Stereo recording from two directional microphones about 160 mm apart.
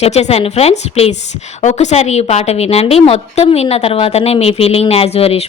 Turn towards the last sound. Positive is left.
turn(degrees=40)  # may be behind; listen again after turning